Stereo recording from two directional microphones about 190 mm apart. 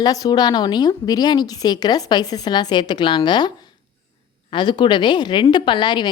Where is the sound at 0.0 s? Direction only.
20° left (ahead or behind).